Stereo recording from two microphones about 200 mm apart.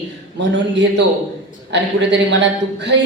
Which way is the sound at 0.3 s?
60° right (ahead or behind).